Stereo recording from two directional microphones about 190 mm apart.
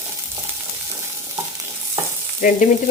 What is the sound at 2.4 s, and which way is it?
Frying, 45° left (ahead or behind).